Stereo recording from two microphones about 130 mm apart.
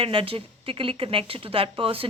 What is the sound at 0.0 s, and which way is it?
Speech, 45° right (ahead or behind).